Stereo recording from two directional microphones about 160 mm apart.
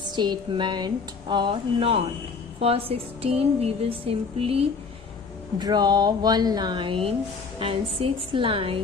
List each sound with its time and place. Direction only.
0.2 s a woman's voice: 30° right (ahead or behind)
5.5 s a woman's voice: 25° right (ahead or behind)